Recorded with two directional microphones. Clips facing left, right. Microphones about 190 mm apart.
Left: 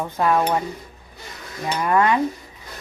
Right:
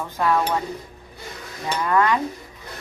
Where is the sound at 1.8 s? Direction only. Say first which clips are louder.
Left 1 dB; 20° left (ahead or behind).